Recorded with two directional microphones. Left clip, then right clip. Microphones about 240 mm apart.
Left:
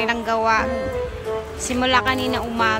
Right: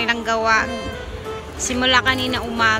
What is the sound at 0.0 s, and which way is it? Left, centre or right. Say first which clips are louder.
Speech: right 1 dB; centre.